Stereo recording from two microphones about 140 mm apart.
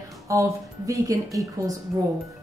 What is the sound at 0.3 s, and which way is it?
A woman's voice, 25° right (ahead or behind).